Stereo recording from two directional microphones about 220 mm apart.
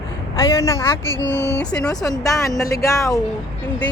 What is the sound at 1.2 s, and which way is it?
Speech, 55° left (ahead or behind).